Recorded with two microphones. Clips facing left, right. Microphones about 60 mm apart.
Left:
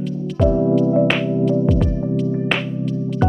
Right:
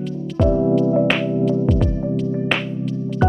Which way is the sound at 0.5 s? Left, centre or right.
Centre.